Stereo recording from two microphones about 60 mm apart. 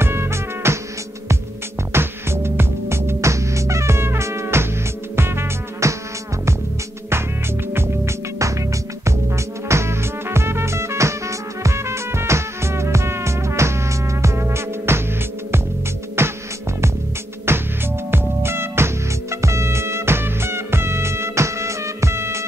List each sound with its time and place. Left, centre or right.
0.0 s music: right
1.9 s music: right
7.7 s music: right
17.5 s music: right